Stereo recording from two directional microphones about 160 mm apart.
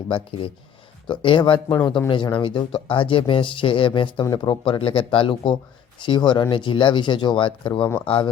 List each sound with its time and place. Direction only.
0.1 s speech: 35° left (ahead or behind)